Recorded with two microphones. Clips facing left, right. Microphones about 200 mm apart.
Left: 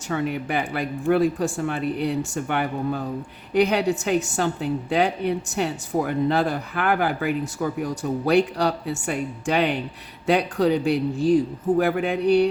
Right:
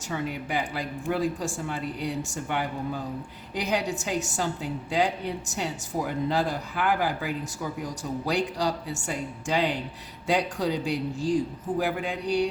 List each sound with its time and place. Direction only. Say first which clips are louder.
0.1 s a woman's voice: left 5 dB; 60° left (ahead or behind)